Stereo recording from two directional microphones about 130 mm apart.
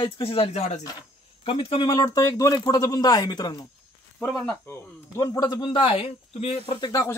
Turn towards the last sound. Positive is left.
turn(degrees=25)  # may be behind; listen again after turning